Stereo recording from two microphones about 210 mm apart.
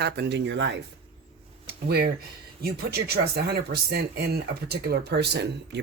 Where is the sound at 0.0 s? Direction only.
55° right (ahead or behind).